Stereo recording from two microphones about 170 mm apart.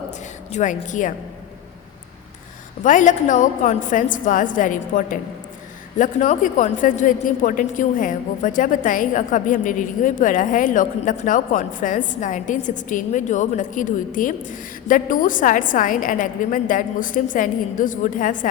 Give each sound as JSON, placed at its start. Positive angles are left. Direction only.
{"t": 0.5, "sound": "a woman's voice", "side_deg": 45}
{"t": 2.8, "sound": "a woman's voice", "side_deg": 50}